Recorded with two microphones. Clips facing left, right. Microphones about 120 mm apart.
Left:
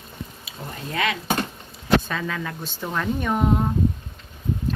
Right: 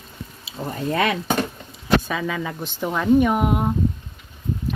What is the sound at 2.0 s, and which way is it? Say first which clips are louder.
Speech: right 3 dB; 5° right (ahead or behind).